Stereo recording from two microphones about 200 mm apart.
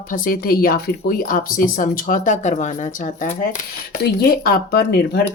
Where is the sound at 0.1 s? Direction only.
45° left (ahead or behind).